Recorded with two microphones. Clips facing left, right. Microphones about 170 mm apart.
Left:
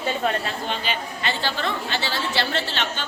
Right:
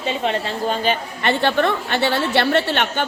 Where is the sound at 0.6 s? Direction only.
45° right (ahead or behind).